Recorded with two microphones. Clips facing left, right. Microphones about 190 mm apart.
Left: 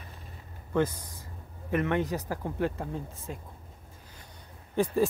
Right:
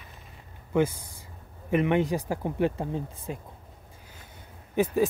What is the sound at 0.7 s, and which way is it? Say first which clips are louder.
Speech: right 3 dB; 10° right (ahead or behind).